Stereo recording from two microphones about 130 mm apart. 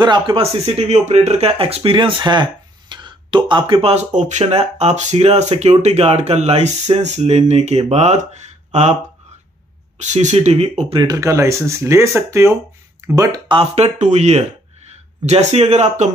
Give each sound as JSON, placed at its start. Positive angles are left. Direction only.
{"t": 0.0, "sound": "speech", "side_deg": -35}
{"t": 0.4, "sound": "speech", "side_deg": -55}
{"t": 2.9, "sound": "a sound", "side_deg": -35}
{"t": 3.9, "sound": "speech", "side_deg": -65}
{"t": 9.9, "sound": "speech", "side_deg": -65}
{"t": 11.0, "sound": "speech", "side_deg": -30}
{"t": 13.5, "sound": "speech", "side_deg": -50}